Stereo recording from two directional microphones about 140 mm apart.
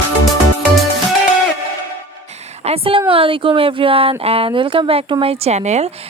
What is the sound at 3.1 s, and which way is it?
A woman's voice, 40° right (ahead or behind).